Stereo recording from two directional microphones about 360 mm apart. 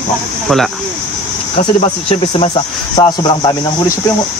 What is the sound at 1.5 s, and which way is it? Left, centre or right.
Speech, centre.